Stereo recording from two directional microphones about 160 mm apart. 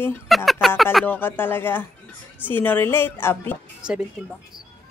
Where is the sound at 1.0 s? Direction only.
10° left (ahead or behind).